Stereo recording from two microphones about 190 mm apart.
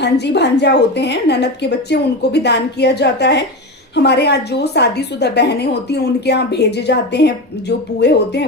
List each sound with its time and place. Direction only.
0.0 s a woman's voice: 60° left (ahead or behind)